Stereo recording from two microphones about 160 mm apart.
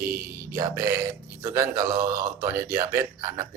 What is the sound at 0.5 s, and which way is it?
Speech, 15° right (ahead or behind).